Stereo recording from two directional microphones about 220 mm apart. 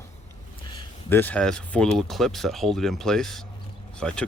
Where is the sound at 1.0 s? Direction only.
10° left (ahead or behind).